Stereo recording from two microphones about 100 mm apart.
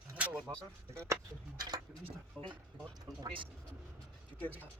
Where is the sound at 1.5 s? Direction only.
45° right (ahead or behind).